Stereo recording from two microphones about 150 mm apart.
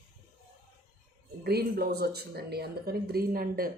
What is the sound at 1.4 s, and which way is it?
Speech, 90° right.